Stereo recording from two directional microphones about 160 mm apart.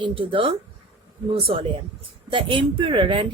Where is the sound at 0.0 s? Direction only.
35° right (ahead or behind).